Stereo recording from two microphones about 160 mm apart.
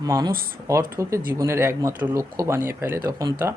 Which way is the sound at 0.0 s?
25° right (ahead or behind).